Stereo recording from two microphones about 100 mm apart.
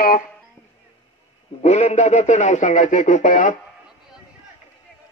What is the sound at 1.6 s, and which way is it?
Speech, 90° left.